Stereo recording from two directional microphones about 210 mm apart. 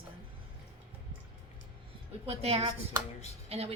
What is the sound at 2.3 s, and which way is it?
A woman's voice, 30° right (ahead or behind).